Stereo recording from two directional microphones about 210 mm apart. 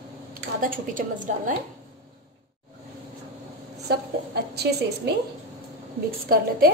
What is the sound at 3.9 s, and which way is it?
A woman's voice, 50° right (ahead or behind).